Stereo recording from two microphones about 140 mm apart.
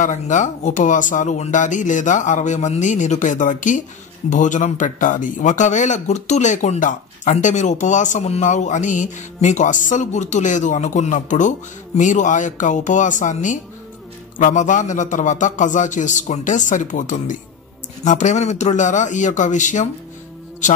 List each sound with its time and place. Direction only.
0.0 s speech: 60° left (ahead or behind)